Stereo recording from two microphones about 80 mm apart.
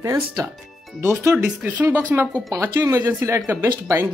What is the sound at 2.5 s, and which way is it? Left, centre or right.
Speech, right.